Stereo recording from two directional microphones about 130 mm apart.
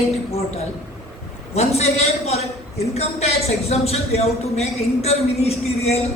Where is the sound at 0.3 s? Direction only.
55° left (ahead or behind).